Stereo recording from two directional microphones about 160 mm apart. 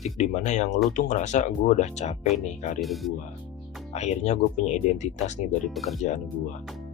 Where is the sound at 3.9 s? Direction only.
45° left (ahead or behind).